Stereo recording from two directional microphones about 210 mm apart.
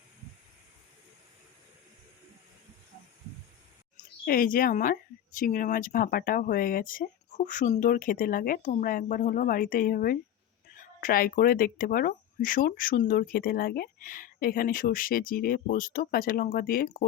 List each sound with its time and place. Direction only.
3.9 s speech: 40° left (ahead or behind)